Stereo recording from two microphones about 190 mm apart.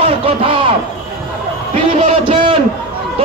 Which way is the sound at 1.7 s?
25° right (ahead or behind).